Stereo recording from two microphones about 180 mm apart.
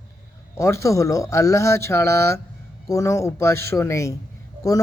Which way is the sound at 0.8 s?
15° left (ahead or behind).